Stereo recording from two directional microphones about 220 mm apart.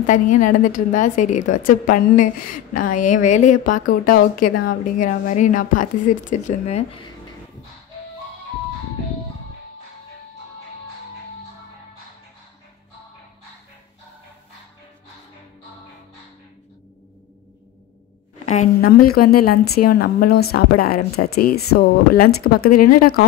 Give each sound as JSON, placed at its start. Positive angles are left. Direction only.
{"t": 0.0, "sound": "a woman's voice", "side_deg": 35}
{"t": 18.4, "sound": "speech", "side_deg": 35}